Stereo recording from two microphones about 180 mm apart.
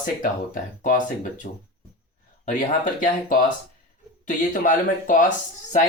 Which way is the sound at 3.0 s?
50° left (ahead or behind).